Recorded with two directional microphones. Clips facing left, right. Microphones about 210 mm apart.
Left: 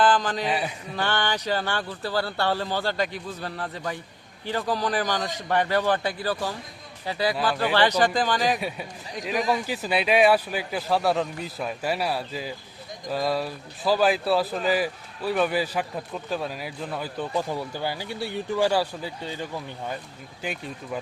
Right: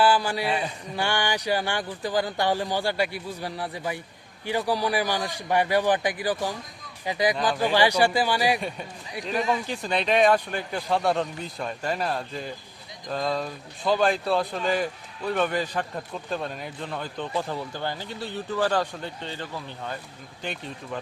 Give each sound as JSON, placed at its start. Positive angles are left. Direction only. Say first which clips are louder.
{"t": 0.0, "sound": "a man's voice", "louder": "even", "side_deg": -10}
{"t": 0.4, "sound": "speech", "louder": "even", "side_deg": 10}
{"t": 0.9, "sound": "speech", "louder": "even", "side_deg": -15}
{"t": 9.5, "sound": "speech", "louder": "left 1 dB", "side_deg": 5}